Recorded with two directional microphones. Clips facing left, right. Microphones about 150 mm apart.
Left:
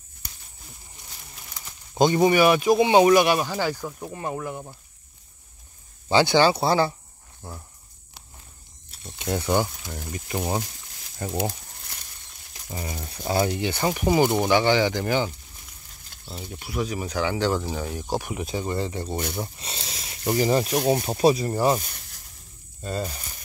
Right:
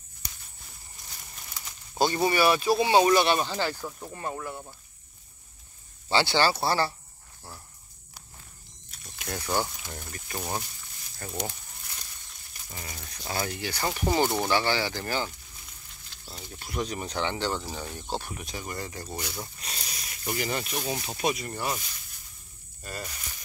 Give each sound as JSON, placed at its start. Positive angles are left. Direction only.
{"t": 2.0, "sound": "speech", "side_deg": 20}
{"t": 6.0, "sound": "speech", "side_deg": 15}
{"t": 9.0, "sound": "speech", "side_deg": 25}
{"t": 12.7, "sound": "speech", "side_deg": 30}
{"t": 16.6, "sound": "speech", "side_deg": 5}
{"t": 18.5, "sound": "speech", "side_deg": 25}
{"t": 20.7, "sound": "speech", "side_deg": 65}
{"t": 21.0, "sound": "speech", "side_deg": 35}
{"t": 22.8, "sound": "speech", "side_deg": 25}